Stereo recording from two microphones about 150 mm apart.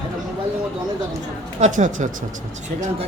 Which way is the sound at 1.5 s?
55° right (ahead or behind).